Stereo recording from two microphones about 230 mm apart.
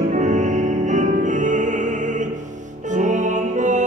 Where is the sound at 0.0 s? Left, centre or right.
Right.